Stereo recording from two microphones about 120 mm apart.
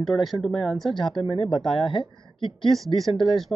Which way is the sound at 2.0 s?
45° left (ahead or behind).